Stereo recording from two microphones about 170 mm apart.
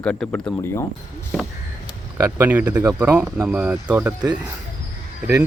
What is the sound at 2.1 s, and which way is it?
Speech, 15° right (ahead or behind).